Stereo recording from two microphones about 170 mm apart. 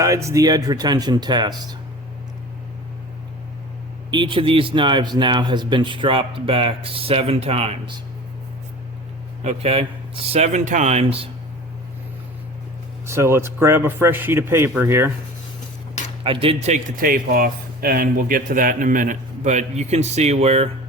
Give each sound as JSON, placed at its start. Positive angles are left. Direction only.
{"t": 0.0, "sound": "speech", "side_deg": -20}
{"t": 4.1, "sound": "speech", "side_deg": -30}
{"t": 9.4, "sound": "speech", "side_deg": -40}
{"t": 13.1, "sound": "speech", "side_deg": -15}
{"t": 16.2, "sound": "speech", "side_deg": -30}
{"t": 17.0, "sound": "speech", "side_deg": -60}